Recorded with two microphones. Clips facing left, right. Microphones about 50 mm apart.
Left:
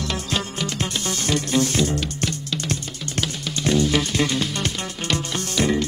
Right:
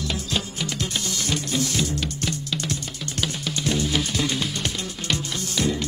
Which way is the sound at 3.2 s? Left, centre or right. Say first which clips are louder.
Left 1 dB; centre.